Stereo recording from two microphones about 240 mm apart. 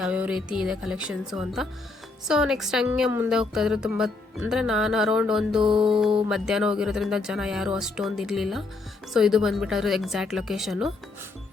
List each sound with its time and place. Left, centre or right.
0.0 s a woman's voice: centre
5.7 s music: centre
6.2 s a woman's voice: centre